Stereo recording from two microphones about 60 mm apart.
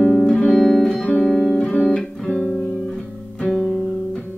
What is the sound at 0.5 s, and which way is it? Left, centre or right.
Music, centre.